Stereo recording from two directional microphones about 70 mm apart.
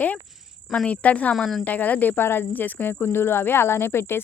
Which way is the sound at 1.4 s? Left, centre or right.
Centre.